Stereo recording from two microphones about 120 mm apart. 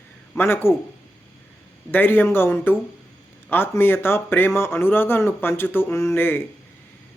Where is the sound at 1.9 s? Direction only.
15° left (ahead or behind).